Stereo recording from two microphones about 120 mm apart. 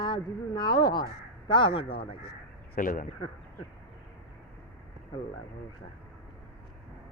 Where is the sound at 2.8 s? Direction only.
90° left.